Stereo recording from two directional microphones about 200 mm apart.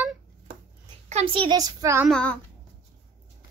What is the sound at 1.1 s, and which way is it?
Speech, 35° right (ahead or behind).